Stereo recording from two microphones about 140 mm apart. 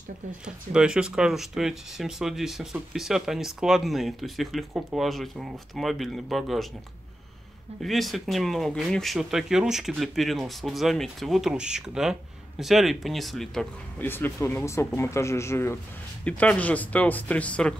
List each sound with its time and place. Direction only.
0.7 s speech: 5° right (ahead or behind)
7.8 s speech: centre (ahead or behind)
13.9 s speech: 15° left (ahead or behind)